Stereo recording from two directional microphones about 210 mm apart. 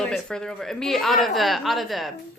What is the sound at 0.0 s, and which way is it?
A woman's voice, 5° left (ahead or behind).